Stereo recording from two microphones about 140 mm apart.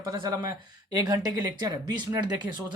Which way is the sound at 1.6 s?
30° right (ahead or behind).